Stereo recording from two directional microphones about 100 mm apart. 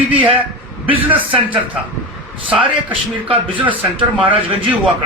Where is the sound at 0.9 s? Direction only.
20° right (ahead or behind).